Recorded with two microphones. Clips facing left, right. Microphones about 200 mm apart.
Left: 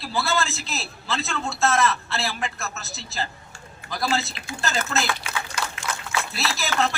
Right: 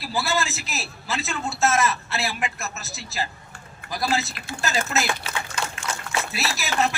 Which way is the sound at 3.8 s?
60° right (ahead or behind).